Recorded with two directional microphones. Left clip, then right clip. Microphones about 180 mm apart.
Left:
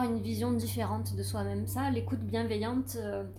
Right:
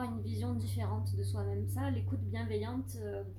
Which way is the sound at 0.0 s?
45° left (ahead or behind).